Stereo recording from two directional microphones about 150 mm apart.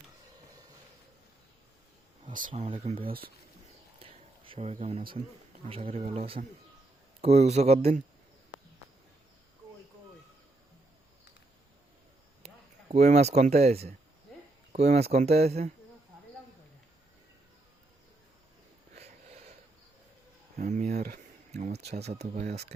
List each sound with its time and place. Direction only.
2.3 s speech: 60° right (ahead or behind)
2.6 s speech: 40° right (ahead or behind)
3.1 s speech: 80° right
4.0 s a sound: 35° right (ahead or behind)
5.6 s speech: 40° right (ahead or behind)
12.9 s speech: 50° right (ahead or behind)
18.9 s a sound: 45° right (ahead or behind)
20.6 s a sound: 55° right (ahead or behind)
21.5 s speech: 50° right (ahead or behind)